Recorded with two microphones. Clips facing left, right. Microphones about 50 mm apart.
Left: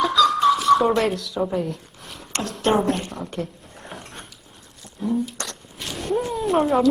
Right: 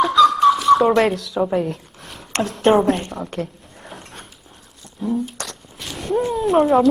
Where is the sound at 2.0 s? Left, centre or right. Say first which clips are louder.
Right 2 dB; centre.